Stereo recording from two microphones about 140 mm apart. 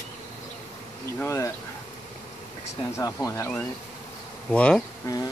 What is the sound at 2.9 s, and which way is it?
Speech, 20° left (ahead or behind).